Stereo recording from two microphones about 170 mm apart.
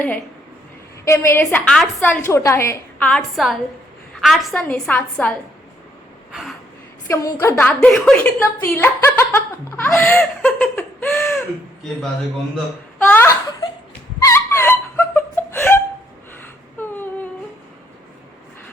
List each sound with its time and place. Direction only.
1.0 s speech: 15° left (ahead or behind)
3.0 s a woman's voice: centre (ahead or behind)
7.1 s speech: 15° left (ahead or behind)
7.7 s a woman's voice: 5° left (ahead or behind)
10.0 s laughter: 10° left (ahead or behind)
13.1 s speech: 15° left (ahead or behind)
14.2 s a sound: 15° left (ahead or behind)
16.7 s humming: 10° left (ahead or behind)